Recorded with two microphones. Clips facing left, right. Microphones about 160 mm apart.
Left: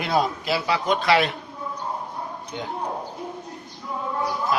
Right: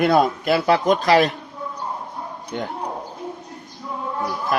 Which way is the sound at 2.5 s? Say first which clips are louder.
Right 6 dB; 55° right (ahead or behind).